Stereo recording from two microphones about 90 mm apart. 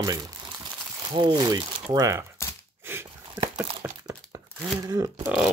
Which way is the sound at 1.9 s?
35° right (ahead or behind).